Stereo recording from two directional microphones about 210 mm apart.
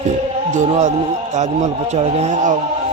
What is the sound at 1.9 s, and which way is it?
Speech, 30° right (ahead or behind).